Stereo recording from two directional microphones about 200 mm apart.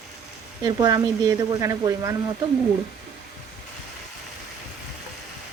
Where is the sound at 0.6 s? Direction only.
20° right (ahead or behind).